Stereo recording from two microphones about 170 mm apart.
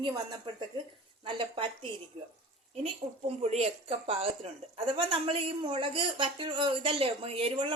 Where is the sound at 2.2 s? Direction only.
35° right (ahead or behind).